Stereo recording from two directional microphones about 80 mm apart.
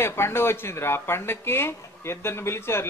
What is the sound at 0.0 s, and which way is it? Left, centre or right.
Speech, left.